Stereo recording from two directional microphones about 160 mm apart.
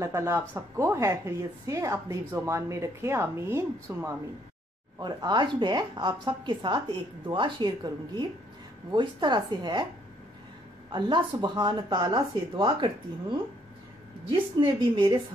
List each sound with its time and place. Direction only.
0.0 s a woman's voice: 20° right (ahead or behind)
4.9 s a woman's voice: 25° right (ahead or behind)
10.9 s a woman's voice: 30° right (ahead or behind)
14.6 s a woman's voice: 30° right (ahead or behind)